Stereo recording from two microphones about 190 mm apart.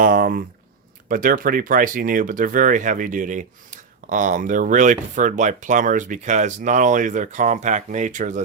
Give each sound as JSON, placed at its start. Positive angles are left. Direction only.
{"t": 0.0, "sound": "speech", "side_deg": -50}